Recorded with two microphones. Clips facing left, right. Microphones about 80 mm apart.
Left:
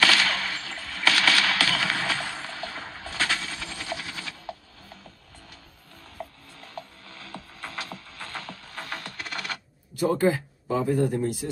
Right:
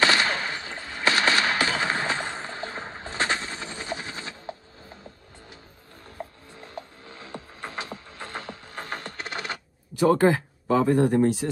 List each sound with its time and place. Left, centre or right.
0.0 s a sound: centre
6.0 s ratchet: right
9.9 s speech: right